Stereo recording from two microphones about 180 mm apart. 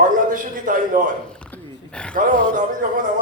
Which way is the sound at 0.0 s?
50° right (ahead or behind).